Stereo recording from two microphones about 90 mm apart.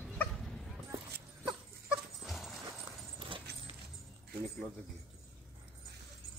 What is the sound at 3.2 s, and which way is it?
Dog, 70° right (ahead or behind).